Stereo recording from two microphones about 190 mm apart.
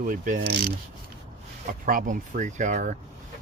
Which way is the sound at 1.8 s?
45° right (ahead or behind).